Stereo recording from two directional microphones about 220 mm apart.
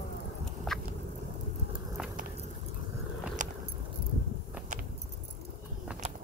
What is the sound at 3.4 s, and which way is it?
Keys jangling, 35° right (ahead or behind).